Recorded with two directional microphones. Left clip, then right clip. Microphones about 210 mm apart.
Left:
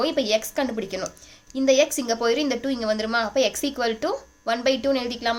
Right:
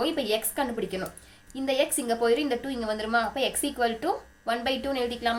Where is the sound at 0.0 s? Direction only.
45° left (ahead or behind).